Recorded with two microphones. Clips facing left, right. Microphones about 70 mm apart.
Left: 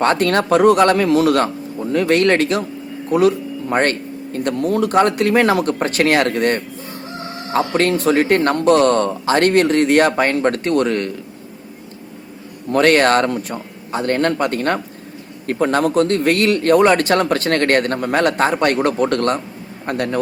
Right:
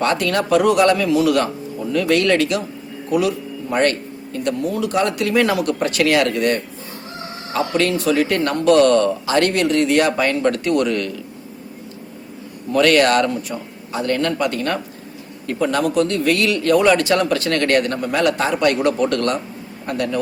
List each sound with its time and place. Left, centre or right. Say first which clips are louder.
0.0 s a man's voice: left 3 dB; left
12.7 s a man's voice: left 1 dB; left